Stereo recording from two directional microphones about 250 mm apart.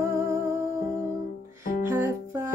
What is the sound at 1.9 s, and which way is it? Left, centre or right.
Music, centre.